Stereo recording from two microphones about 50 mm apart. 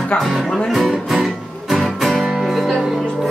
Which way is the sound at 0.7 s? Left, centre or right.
Centre.